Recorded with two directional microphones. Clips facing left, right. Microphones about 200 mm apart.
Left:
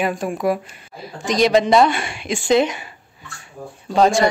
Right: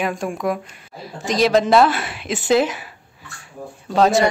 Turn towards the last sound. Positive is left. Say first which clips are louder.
# even
turn(degrees=0)  # may be behind; listen again after turning